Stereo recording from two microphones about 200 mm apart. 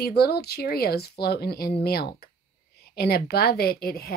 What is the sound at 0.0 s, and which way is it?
A woman's voice, 50° left (ahead or behind).